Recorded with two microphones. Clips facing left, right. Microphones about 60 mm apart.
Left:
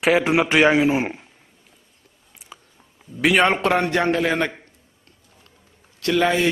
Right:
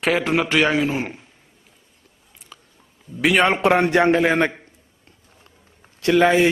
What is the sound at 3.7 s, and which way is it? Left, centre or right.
Speech, centre.